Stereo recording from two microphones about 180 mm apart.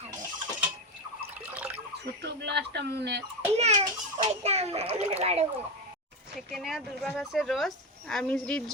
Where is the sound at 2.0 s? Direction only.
70° right (ahead or behind).